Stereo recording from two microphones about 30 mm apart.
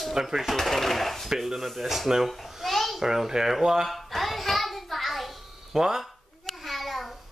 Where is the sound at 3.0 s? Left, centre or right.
Centre.